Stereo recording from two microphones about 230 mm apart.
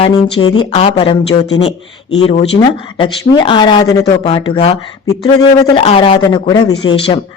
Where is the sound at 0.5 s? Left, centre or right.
Left.